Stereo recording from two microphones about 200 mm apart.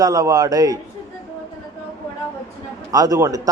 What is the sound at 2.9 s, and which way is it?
Speech, 15° right (ahead or behind).